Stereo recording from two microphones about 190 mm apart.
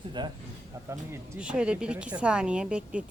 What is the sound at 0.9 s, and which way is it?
Speech, 10° right (ahead or behind).